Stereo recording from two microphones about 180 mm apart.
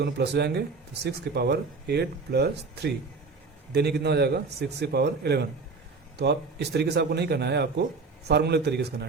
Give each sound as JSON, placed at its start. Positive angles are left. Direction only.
{"t": 0.0, "sound": "a man's voice", "side_deg": -65}